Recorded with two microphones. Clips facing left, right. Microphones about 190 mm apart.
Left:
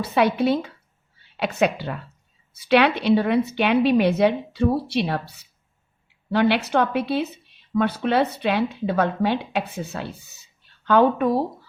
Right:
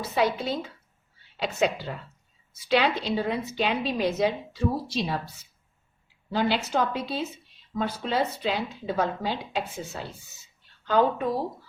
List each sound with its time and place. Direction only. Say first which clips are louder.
0.0 s a woman's voice: left 6 dB; 65° left (ahead or behind)